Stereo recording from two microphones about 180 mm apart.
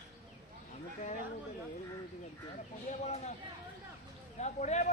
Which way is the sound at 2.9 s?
40° left (ahead or behind).